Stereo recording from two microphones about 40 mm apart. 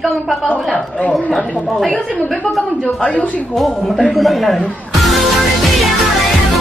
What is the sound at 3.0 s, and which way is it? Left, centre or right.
Speech, left.